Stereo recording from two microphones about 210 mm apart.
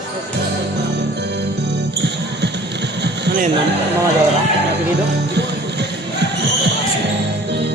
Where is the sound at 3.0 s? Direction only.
55° right (ahead or behind).